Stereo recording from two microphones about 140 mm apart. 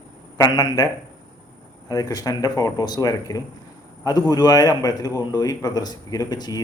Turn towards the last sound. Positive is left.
turn(degrees=30)  # may be behind; listen again after turning